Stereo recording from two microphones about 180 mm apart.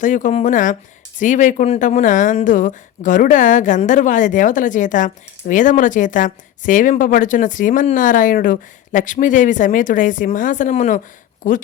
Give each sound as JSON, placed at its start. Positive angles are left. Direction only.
{"t": 0.0, "sound": "speech", "side_deg": 45}